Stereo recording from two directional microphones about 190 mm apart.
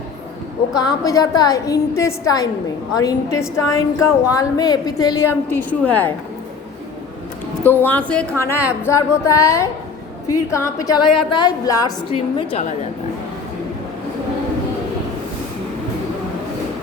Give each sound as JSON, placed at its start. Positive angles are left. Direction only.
{"t": 0.8, "sound": "a woman's voice", "side_deg": 20}
{"t": 5.5, "sound": "speech", "side_deg": 10}
{"t": 7.6, "sound": "a woman's voice", "side_deg": 10}
{"t": 12.1, "sound": "a woman's voice", "side_deg": 30}